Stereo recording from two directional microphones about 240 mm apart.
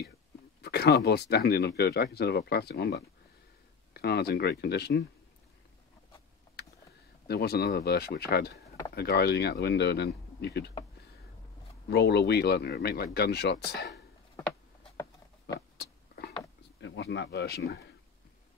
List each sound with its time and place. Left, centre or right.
0.6 s speech: left
7.2 s speech: left
11.9 s speech: left
15.8 s a sound: left
16.8 s speech: left